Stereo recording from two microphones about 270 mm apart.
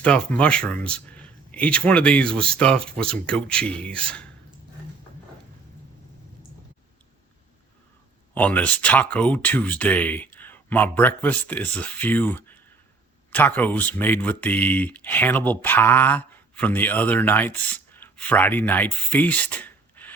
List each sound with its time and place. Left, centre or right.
0.0 s speech: centre
8.4 s speech: centre